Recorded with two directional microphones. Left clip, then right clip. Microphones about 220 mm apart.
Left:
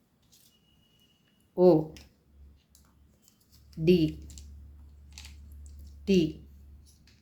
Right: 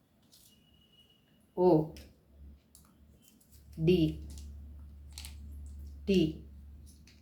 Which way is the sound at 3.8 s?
45° left (ahead or behind).